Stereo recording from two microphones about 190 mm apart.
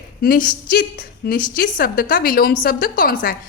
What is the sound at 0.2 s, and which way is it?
Speech, 50° left (ahead or behind).